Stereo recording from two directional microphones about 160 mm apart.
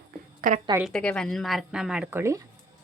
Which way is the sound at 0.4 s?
60° right (ahead or behind).